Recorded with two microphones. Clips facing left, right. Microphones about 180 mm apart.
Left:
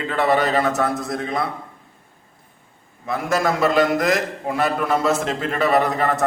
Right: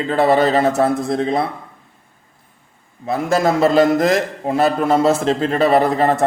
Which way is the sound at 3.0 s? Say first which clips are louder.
Right 4 dB; 30° right (ahead or behind).